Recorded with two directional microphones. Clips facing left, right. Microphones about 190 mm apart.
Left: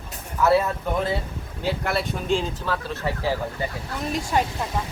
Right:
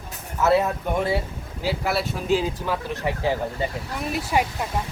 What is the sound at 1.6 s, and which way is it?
Speech, 5° right (ahead or behind).